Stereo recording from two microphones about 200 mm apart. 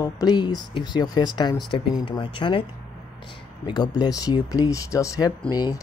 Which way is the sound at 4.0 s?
20° left (ahead or behind).